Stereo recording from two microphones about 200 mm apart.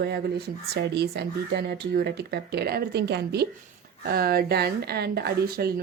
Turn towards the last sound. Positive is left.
turn(degrees=-50)  # may be behind; listen again after turning